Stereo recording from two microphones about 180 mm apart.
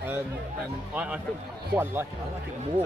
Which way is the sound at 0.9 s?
5° right (ahead or behind).